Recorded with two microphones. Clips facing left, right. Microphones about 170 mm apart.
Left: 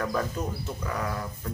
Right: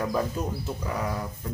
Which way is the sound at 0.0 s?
15° right (ahead or behind).